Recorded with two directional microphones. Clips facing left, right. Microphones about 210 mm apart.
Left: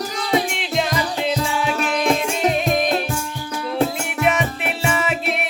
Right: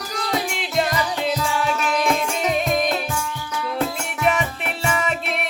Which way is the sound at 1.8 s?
35° left (ahead or behind).